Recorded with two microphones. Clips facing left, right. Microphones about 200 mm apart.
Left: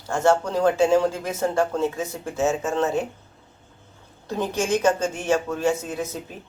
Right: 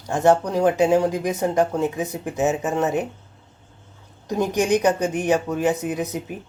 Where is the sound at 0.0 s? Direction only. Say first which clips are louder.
Right 2 dB; 15° right (ahead or behind).